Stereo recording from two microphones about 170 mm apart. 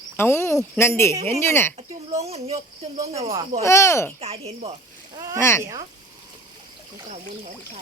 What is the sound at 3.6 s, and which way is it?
Speech, 15° left (ahead or behind).